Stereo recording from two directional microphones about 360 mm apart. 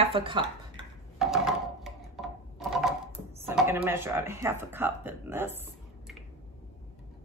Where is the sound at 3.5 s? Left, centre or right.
Centre.